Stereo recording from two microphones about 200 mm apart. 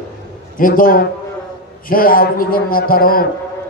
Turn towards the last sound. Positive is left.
turn(degrees=45)  # may be behind; listen again after turning